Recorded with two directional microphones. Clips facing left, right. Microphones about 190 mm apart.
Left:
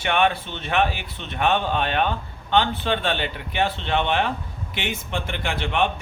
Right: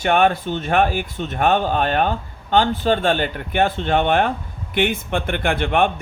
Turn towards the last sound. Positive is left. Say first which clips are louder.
# right 5 dB
turn(degrees=-55)  # may be behind; listen again after turning